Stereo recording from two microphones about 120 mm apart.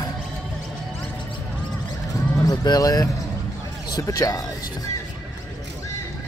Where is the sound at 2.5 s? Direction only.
30° left (ahead or behind).